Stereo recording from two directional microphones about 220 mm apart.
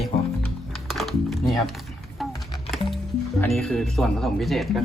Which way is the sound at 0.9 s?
Centre (ahead or behind).